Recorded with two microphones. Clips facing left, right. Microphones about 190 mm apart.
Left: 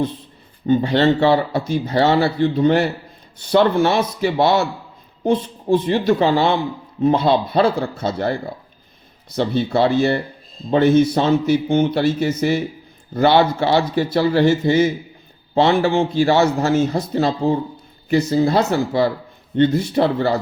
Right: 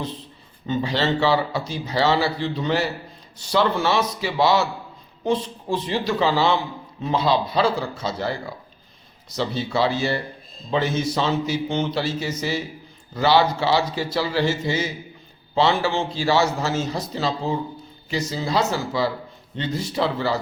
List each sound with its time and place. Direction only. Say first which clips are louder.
0.7 s a man's voice: left 7 dB; 55° left (ahead or behind)